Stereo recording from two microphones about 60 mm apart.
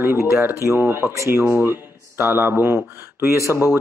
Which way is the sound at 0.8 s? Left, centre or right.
Right.